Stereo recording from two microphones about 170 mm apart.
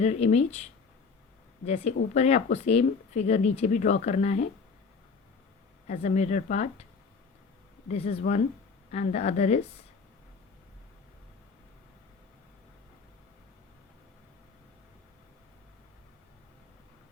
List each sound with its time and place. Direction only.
0.0 s speech: 40° left (ahead or behind)
5.9 s speech: 40° left (ahead or behind)
7.9 s speech: 35° left (ahead or behind)